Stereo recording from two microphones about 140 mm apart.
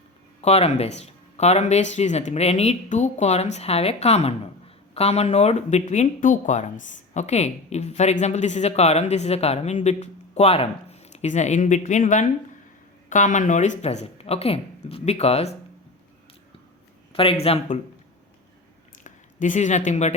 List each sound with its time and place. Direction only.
0.4 s speech: 50° left (ahead or behind)
17.1 s speech: 40° left (ahead or behind)
19.0 s speech: 65° left (ahead or behind)